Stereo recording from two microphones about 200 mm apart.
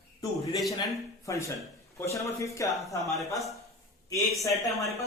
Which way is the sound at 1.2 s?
15° left (ahead or behind).